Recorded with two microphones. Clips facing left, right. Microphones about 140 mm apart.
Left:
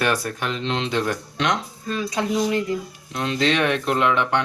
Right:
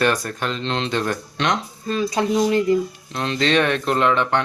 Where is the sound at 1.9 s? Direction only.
35° right (ahead or behind).